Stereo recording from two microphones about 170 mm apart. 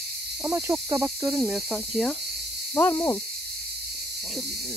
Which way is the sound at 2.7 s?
15° left (ahead or behind).